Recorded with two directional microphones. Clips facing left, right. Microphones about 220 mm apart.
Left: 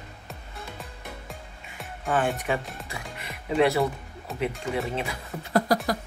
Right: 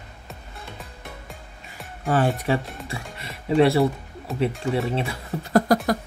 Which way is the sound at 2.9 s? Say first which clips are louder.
Right 3 dB; 30° right (ahead or behind).